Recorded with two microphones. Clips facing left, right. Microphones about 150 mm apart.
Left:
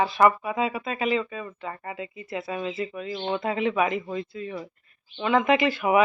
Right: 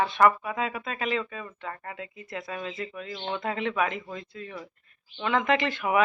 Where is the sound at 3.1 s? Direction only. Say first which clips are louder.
Left 5 dB; 15° left (ahead or behind).